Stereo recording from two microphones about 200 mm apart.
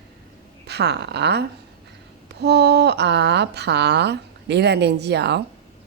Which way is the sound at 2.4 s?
55° right (ahead or behind).